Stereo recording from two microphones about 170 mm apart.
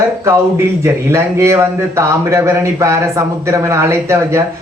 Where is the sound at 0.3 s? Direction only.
15° right (ahead or behind).